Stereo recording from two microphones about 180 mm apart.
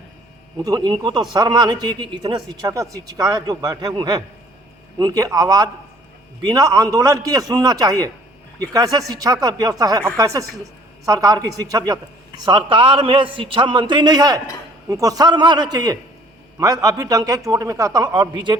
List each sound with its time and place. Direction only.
0.6 s a man's voice: 20° right (ahead or behind)